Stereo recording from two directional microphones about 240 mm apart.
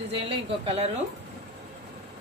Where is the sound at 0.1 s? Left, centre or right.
Right.